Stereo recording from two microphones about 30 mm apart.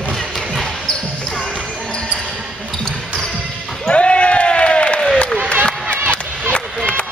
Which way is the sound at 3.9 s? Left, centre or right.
Left.